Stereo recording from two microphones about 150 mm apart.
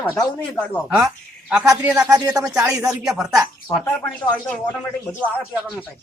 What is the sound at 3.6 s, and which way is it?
Speech, 15° left (ahead or behind).